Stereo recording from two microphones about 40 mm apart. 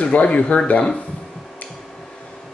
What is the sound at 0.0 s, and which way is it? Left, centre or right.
Speech, left.